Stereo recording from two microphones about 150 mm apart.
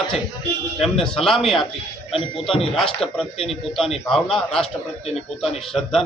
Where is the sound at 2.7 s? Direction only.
Centre (ahead or behind).